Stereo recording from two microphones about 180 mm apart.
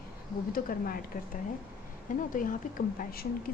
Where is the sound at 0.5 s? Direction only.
50° left (ahead or behind).